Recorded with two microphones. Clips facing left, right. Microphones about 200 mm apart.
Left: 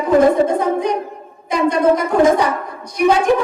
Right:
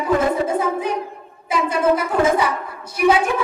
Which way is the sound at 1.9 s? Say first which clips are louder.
Left 4 dB; 5° right (ahead or behind).